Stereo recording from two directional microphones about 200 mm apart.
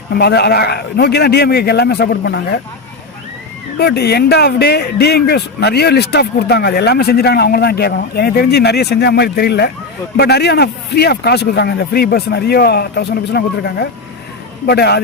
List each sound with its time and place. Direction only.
0.1 s speech: 55° left (ahead or behind)
3.8 s speech: 55° left (ahead or behind)